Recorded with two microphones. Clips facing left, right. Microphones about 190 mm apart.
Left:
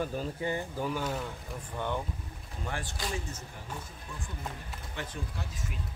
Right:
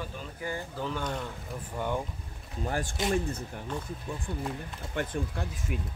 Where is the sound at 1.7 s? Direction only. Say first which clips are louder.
Right 2 dB; 10° right (ahead or behind).